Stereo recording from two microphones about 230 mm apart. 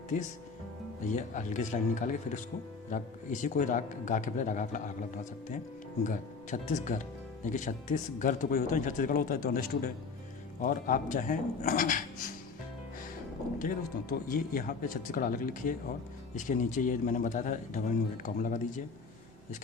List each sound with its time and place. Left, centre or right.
0.1 s speech: left
13.6 s speech: left